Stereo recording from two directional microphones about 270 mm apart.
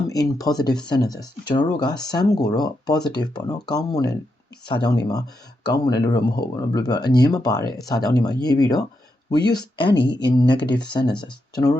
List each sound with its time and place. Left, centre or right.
0.1 s speech: centre